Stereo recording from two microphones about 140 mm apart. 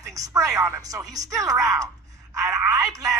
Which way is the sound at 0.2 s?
20° right (ahead or behind).